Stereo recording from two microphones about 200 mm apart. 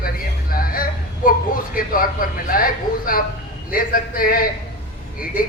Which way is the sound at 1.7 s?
45° left (ahead or behind).